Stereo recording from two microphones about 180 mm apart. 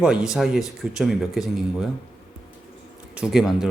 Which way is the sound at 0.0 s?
5° right (ahead or behind).